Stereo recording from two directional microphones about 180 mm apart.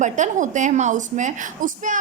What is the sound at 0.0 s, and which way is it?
A woman's voice, 45° right (ahead or behind).